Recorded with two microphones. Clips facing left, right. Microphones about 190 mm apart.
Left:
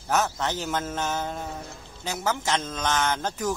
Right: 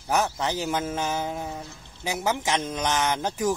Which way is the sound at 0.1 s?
15° right (ahead or behind).